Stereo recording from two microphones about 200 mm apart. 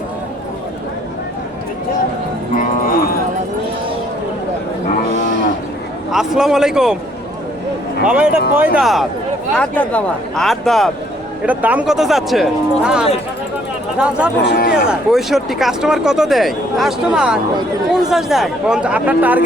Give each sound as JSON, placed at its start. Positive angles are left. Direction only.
{"t": 2.6, "sound": "cattle", "side_deg": 45}
{"t": 6.1, "sound": "speech", "side_deg": 0}
{"t": 8.0, "sound": "speech", "side_deg": -5}
{"t": 14.4, "sound": "speech", "side_deg": 45}
{"t": 14.7, "sound": "speech", "side_deg": 0}